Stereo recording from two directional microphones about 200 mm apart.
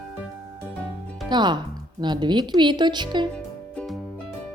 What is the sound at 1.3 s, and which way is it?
Speech, 20° right (ahead or behind).